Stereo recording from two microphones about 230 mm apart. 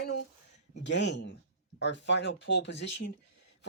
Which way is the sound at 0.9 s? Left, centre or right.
Left.